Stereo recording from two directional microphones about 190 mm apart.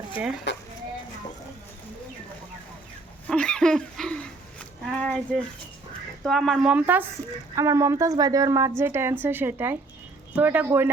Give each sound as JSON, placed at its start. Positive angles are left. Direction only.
{"t": 0.5, "sound": "speech", "side_deg": 70}
{"t": 3.2, "sound": "speech", "side_deg": 5}